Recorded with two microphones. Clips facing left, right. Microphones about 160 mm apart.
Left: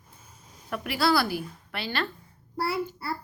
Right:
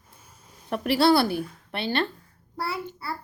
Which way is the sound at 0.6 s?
35° right (ahead or behind).